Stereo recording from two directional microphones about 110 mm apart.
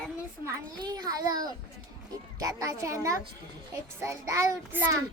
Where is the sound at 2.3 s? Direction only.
30° right (ahead or behind).